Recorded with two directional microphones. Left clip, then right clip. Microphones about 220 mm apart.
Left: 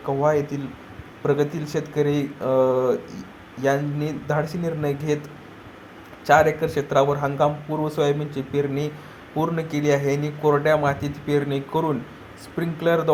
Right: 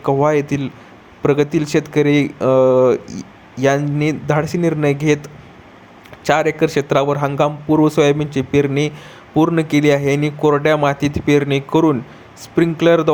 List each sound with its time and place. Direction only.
0.0 s speech: 35° right (ahead or behind)